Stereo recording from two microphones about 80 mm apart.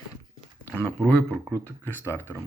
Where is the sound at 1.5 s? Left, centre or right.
Left.